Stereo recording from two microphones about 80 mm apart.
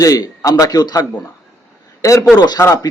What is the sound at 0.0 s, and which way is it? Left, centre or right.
A man's voice, left.